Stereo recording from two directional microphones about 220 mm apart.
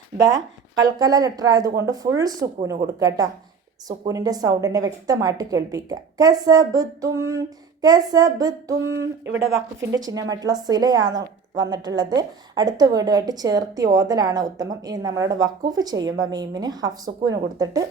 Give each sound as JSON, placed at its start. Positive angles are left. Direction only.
{"t": 0.8, "sound": "a woman's voice", "side_deg": -15}